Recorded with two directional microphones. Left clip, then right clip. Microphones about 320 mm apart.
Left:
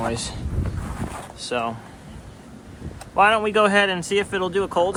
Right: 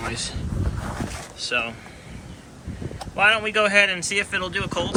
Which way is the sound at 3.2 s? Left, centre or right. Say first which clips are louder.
Left 2 dB; centre.